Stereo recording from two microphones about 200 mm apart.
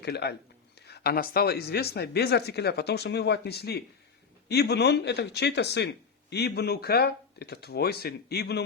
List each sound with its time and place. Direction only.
0.0 s speech: 55° left (ahead or behind)